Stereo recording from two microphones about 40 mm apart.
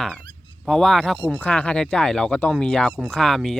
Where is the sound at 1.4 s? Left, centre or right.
Left.